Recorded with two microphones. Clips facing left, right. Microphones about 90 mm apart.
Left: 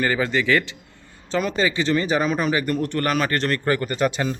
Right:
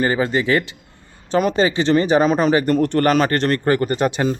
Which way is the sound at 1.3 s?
55° right (ahead or behind).